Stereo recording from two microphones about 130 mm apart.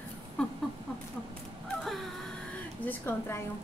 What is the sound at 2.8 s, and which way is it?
Speech, 15° left (ahead or behind).